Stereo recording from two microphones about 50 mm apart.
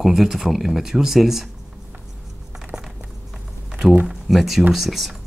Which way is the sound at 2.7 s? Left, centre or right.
Centre.